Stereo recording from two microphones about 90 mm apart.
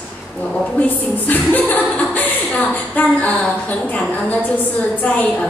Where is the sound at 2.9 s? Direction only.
15° left (ahead or behind).